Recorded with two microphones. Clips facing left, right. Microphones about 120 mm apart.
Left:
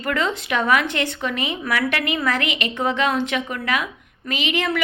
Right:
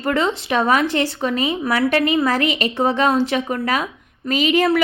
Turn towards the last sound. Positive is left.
turn(degrees=-35)  # may be behind; listen again after turning